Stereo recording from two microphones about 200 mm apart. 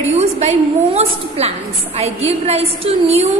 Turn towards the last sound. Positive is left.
turn(degrees=-30)  # may be behind; listen again after turning